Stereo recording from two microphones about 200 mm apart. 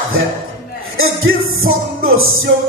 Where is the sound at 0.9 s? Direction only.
90° right.